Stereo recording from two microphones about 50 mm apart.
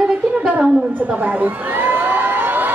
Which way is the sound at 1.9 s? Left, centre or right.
Right.